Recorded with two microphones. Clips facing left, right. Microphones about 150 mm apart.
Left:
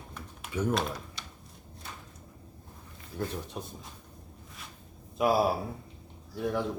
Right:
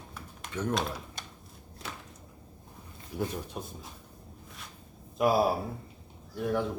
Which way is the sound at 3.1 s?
5° right (ahead or behind).